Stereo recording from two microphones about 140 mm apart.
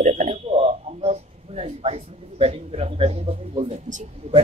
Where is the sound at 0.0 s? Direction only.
60° right (ahead or behind).